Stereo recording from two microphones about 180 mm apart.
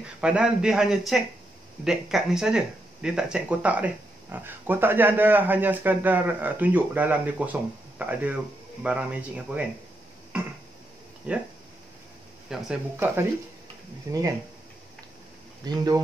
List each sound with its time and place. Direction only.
0.2 s speech: 5° right (ahead or behind)
11.3 s speech: 5° right (ahead or behind)
12.4 s speech: 5° right (ahead or behind)
15.6 s speech: 20° right (ahead or behind)